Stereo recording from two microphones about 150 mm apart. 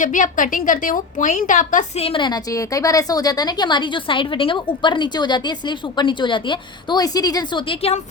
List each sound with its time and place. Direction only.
0.0 s a woman's voice: 60° left (ahead or behind)
2.0 s a woman's voice: 35° left (ahead or behind)